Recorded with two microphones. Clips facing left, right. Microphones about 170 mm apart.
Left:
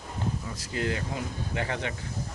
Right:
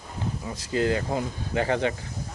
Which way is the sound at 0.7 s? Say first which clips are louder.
Right 6 dB; 35° right (ahead or behind).